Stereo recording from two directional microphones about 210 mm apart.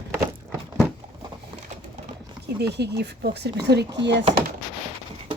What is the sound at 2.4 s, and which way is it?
A woman's voice, 50° right (ahead or behind).